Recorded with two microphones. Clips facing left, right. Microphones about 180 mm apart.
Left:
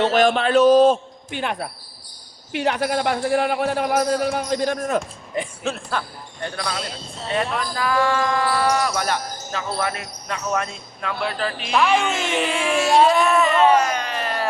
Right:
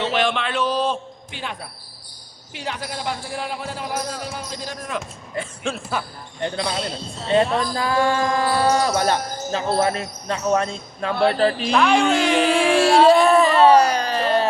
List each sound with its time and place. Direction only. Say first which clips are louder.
0.0 s a man's voice: left 5 dB; 45° left (ahead or behind)
5.6 s speech: right 3 dB; 5° right (ahead or behind)
6.4 s speech: right 4 dB; 25° right (ahead or behind)
11.7 s speech: left 1 dB; centre (ahead or behind)
12.7 s speech: right 2 dB; 30° right (ahead or behind)